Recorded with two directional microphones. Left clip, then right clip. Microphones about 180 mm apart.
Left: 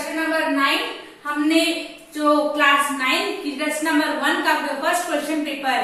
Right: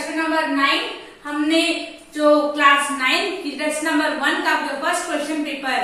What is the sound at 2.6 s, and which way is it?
A woman's voice, 10° right (ahead or behind).